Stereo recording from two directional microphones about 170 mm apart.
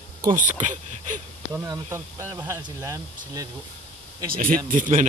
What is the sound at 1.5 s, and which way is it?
Speech, 20° right (ahead or behind).